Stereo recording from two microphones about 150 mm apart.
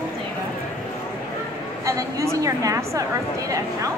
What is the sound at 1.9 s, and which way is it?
A woman's voice, 20° right (ahead or behind).